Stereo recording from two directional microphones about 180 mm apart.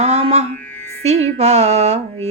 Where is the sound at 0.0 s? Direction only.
35° right (ahead or behind).